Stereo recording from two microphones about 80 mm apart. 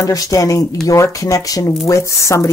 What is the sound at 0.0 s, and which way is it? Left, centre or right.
Speech, left.